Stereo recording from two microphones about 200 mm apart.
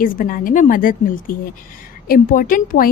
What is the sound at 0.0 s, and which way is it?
A woman's voice, 45° left (ahead or behind).